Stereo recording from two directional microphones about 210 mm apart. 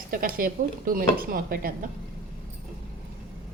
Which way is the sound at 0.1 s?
40° right (ahead or behind).